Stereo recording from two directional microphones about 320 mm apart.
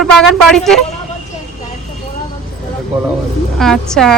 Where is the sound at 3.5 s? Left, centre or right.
Centre.